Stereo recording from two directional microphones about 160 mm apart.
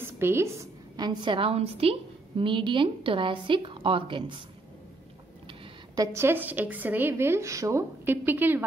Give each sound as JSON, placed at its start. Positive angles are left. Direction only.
{"t": 0.0, "sound": "a sound", "side_deg": -15}
{"t": 0.9, "sound": "a woman's voice", "side_deg": -25}
{"t": 6.1, "sound": "a woman's voice", "side_deg": -15}